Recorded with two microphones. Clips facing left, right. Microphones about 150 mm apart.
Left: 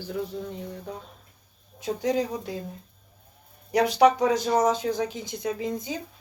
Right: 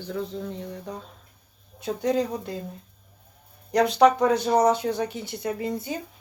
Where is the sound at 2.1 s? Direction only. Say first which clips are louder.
Right 1 dB; 10° left (ahead or behind).